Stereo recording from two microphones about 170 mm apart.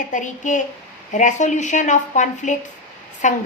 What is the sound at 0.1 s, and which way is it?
A woman's voice, 50° left (ahead or behind).